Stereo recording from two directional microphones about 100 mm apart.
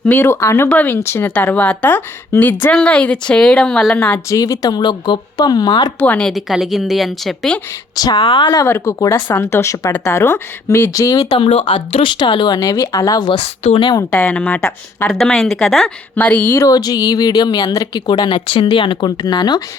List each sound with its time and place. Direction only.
0.0 s speech: 20° left (ahead or behind)
0.7 s speech: 15° left (ahead or behind)
4.3 s speech: 35° left (ahead or behind)
6.0 s speech: 15° left (ahead or behind)
6.2 s speech: centre (ahead or behind)
7.9 s speech: 40° left (ahead or behind)
8.6 s speech: 25° left (ahead or behind)
11.3 s speech: 60° left (ahead or behind)
12.5 s speech: 35° left (ahead or behind)
13.6 s a woman's voice: 90° left
14.1 s speech: 10° left (ahead or behind)
16.6 s speech: 40° left (ahead or behind)